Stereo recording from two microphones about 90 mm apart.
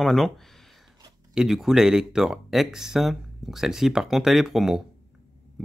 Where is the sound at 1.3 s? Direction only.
5° right (ahead or behind).